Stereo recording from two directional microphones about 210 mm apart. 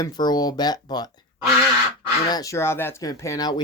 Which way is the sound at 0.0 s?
20° left (ahead or behind).